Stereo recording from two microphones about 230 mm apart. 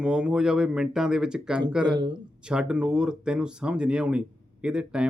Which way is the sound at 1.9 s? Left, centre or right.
Centre.